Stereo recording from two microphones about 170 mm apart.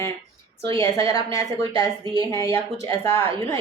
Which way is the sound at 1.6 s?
30° right (ahead or behind).